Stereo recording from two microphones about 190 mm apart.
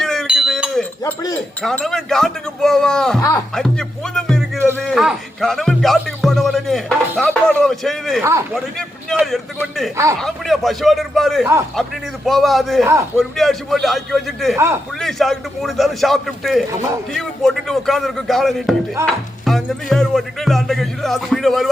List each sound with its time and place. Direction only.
0.0 s wind chime: centre (ahead or behind)
1.6 s speech: centre (ahead or behind)
3.2 s speech: 15° left (ahead or behind)
3.5 s speech: 5° left (ahead or behind)
8.2 s a man's voice: 15° right (ahead or behind)
9.6 s speech: centre (ahead or behind)
14.5 s a man's voice: 15° right (ahead or behind)
15.0 s speech: centre (ahead or behind)